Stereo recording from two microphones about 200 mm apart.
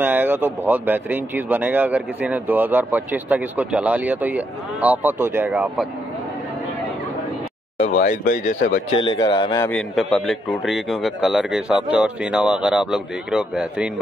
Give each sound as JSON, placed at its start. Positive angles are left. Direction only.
{"t": 0.0, "sound": "speech", "side_deg": -10}
{"t": 8.0, "sound": "speech", "side_deg": 40}
{"t": 8.9, "sound": "speech", "side_deg": 20}
{"t": 9.8, "sound": "a man's voice", "side_deg": 0}